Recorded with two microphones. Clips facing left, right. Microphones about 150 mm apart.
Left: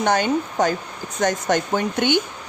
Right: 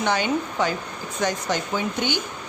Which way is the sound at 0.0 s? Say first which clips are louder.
Left 3 dB; 45° left (ahead or behind).